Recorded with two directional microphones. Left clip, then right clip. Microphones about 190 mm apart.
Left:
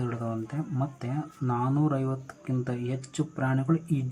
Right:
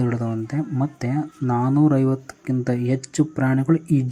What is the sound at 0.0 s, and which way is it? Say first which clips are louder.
Speech: right 8 dB; 25° right (ahead or behind).